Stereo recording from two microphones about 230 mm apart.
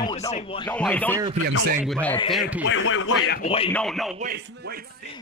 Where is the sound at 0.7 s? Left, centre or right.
Centre.